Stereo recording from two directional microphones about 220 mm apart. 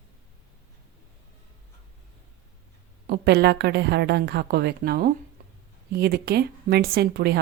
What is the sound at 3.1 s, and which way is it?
Speech, 50° right (ahead or behind).